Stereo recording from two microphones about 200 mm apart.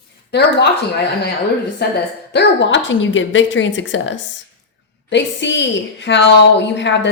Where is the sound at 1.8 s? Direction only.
55° left (ahead or behind).